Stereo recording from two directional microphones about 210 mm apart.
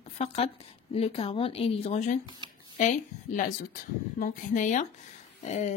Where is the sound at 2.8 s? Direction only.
35° left (ahead or behind).